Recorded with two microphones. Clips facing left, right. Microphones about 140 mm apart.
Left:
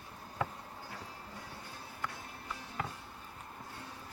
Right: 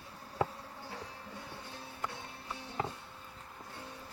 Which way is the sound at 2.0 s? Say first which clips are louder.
Right 1 dB; 25° right (ahead or behind).